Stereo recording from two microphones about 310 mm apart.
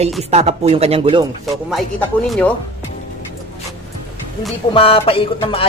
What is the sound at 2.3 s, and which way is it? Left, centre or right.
Speech, centre.